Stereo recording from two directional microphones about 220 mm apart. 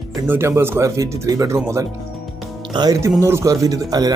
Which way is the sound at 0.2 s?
10° right (ahead or behind).